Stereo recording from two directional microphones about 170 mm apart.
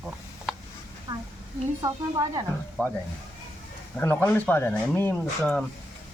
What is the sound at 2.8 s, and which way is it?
Speech, 10° left (ahead or behind).